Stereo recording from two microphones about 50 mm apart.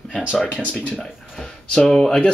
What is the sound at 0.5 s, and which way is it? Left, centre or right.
Speech, left.